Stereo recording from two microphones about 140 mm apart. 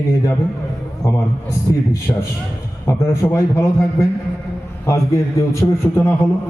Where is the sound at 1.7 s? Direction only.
25° left (ahead or behind).